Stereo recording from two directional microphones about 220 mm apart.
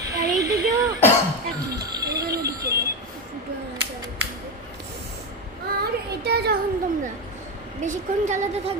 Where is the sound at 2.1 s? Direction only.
45° right (ahead or behind).